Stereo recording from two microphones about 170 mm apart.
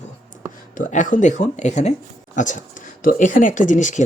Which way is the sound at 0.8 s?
50° left (ahead or behind).